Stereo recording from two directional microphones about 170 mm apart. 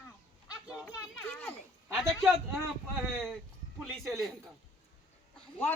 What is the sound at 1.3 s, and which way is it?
Speech, 10° left (ahead or behind).